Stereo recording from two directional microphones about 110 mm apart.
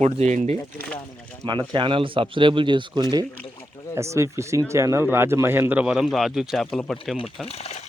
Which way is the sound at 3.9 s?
25° right (ahead or behind).